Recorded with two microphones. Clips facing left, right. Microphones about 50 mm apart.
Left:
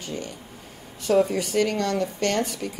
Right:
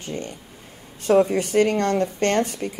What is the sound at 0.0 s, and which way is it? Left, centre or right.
A woman's voice, right.